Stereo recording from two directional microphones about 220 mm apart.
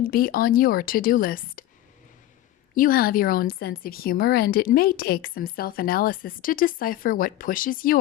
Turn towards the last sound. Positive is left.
turn(degrees=40)  # may be behind; listen again after turning